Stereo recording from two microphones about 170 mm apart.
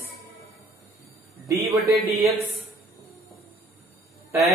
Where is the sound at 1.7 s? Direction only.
20° right (ahead or behind).